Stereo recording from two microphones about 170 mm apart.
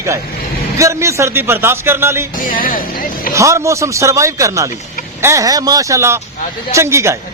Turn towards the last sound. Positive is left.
turn(degrees=-15)  # may be behind; listen again after turning